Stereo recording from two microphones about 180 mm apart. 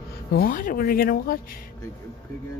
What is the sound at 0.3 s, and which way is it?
Speech, 55° left (ahead or behind).